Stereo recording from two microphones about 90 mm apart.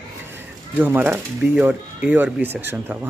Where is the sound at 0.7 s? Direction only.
20° right (ahead or behind).